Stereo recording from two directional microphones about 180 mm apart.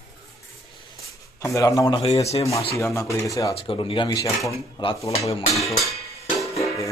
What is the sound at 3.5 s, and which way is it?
Speech, 30° left (ahead or behind).